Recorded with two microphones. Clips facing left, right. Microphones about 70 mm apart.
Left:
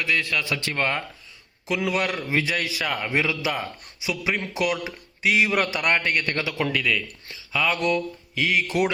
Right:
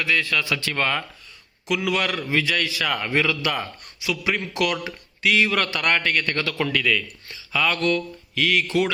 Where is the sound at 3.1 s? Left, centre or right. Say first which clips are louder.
Right 2 dB; centre.